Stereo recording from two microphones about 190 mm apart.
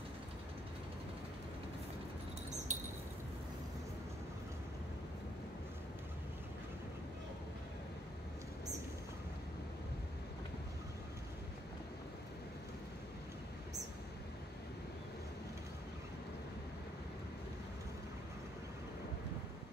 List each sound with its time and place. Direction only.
2.7 s wind chime: 40° right (ahead or behind)